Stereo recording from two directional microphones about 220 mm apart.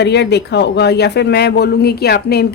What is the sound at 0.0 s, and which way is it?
Speech, 50° left (ahead or behind).